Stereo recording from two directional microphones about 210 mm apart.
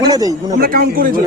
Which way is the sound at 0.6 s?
45° right (ahead or behind).